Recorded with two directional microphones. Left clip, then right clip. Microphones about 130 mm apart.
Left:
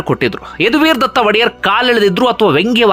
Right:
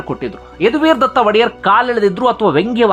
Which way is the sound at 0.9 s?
15° left (ahead or behind).